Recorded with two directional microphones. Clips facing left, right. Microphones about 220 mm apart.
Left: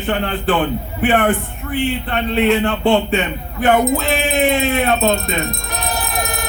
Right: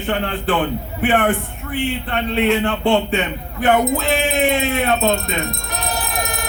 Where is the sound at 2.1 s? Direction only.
40° left (ahead or behind).